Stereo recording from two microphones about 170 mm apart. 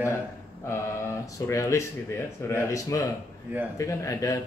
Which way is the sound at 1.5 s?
15° left (ahead or behind).